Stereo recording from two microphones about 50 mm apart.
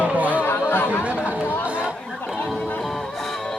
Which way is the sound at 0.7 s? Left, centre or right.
Left.